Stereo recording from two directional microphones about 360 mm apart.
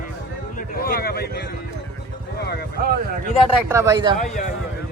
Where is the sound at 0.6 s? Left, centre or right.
Left.